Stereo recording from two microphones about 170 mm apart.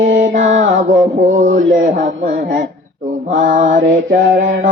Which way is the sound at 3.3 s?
50° right (ahead or behind).